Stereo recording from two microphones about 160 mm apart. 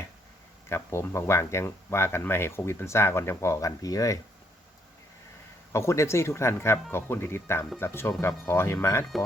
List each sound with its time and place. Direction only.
0.7 s speech: 15° left (ahead or behind)
5.7 s speech: 15° left (ahead or behind)